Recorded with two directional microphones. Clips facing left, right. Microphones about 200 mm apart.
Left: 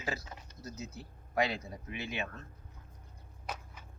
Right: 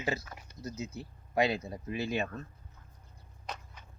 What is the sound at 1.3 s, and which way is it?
Speech, 25° right (ahead or behind).